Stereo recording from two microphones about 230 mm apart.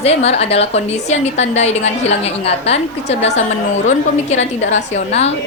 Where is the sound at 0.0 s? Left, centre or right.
Left.